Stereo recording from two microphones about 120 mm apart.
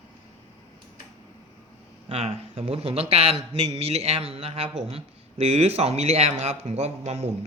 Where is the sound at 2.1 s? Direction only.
60° right (ahead or behind).